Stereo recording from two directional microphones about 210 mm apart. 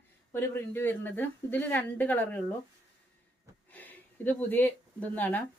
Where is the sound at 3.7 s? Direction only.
10° left (ahead or behind).